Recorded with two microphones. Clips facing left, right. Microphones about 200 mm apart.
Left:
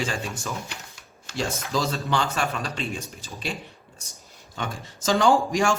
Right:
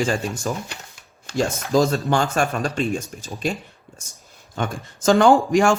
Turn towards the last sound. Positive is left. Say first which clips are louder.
# right 5 dB
turn(degrees=-55)  # may be behind; listen again after turning